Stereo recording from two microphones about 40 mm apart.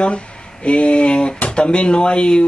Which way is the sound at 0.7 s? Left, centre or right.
Left.